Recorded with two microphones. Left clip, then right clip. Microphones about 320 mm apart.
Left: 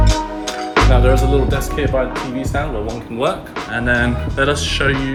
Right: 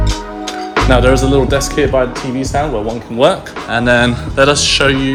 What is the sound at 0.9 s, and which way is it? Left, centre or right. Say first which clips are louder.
Speech: right 5 dB; right.